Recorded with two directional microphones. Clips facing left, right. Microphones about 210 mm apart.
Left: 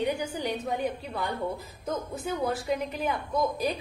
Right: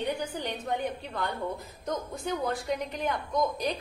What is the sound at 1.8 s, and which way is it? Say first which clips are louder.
A woman's voice: left 1 dB; 5° left (ahead or behind).